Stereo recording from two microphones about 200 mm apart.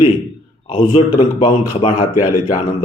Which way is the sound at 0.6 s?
25° left (ahead or behind).